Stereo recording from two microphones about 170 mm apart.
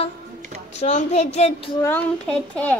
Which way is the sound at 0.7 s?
40° left (ahead or behind).